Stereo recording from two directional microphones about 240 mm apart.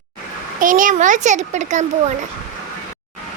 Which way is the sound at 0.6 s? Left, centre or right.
Right.